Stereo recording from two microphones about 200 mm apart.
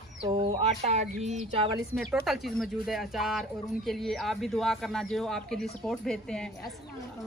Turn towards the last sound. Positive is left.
turn(degrees=5)  # may be behind; listen again after turning